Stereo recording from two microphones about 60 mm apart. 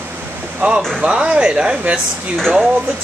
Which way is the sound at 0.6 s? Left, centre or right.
Right.